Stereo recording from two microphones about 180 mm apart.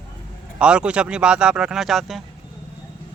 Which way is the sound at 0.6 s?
5° right (ahead or behind).